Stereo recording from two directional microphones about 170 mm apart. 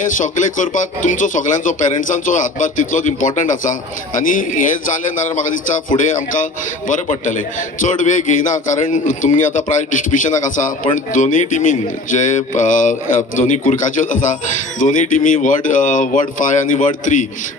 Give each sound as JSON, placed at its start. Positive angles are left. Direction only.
{"t": 0.0, "sound": "speech", "side_deg": 50}
{"t": 6.1, "sound": "speech", "side_deg": 50}